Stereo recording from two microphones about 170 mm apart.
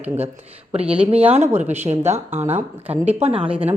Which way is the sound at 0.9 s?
35° right (ahead or behind).